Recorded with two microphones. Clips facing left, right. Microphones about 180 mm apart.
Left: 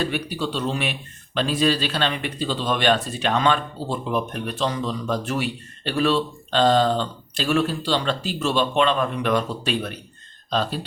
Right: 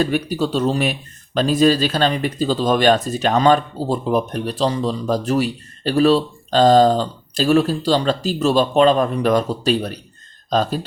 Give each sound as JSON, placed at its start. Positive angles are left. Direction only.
{"t": 0.0, "sound": "a man's voice", "side_deg": -45}